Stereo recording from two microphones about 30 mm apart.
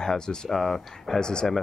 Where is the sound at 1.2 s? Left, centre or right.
Left.